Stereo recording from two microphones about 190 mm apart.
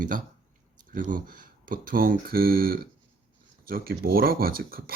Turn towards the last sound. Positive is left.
turn(degrees=-50)  # may be behind; listen again after turning